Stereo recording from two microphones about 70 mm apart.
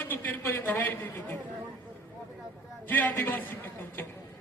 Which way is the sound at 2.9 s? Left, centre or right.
Left.